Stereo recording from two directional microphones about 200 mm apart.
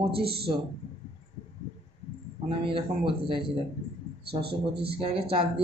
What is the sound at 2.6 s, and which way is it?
Speech, 25° right (ahead or behind).